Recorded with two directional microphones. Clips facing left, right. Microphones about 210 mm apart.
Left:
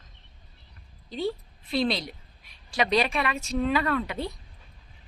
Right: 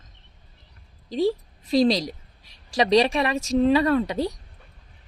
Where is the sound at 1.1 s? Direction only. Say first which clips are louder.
Right 7 dB; 35° right (ahead or behind).